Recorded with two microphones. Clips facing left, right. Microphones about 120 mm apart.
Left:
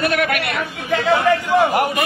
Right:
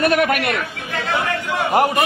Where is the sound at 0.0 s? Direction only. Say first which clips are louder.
Right 2 dB; 45° right (ahead or behind).